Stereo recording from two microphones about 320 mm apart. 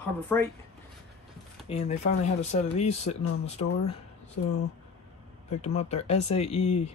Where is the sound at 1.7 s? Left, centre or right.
Left.